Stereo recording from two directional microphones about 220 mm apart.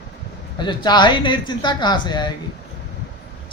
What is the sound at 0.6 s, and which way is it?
Speech, 20° left (ahead or behind).